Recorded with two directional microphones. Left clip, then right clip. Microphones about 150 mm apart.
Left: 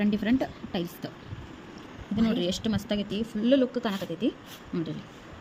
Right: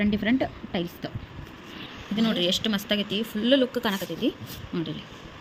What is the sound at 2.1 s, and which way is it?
Speech, 5° left (ahead or behind).